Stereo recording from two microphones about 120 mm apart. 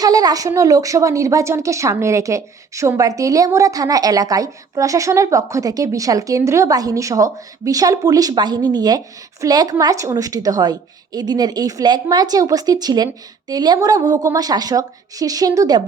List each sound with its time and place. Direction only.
0.0 s a woman's voice: 30° right (ahead or behind)